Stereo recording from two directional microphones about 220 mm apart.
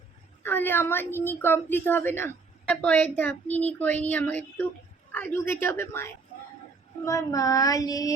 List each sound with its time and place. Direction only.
0.4 s a woman's voice: 10° left (ahead or behind)